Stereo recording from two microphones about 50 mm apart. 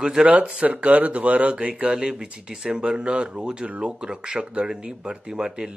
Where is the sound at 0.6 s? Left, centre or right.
Right.